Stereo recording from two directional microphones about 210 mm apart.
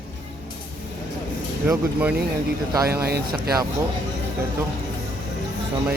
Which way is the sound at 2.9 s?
50° right (ahead or behind).